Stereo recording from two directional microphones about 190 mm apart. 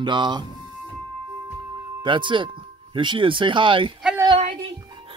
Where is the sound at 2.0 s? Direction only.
25° right (ahead or behind).